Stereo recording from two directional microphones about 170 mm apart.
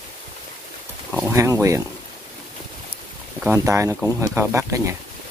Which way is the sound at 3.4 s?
15° right (ahead or behind).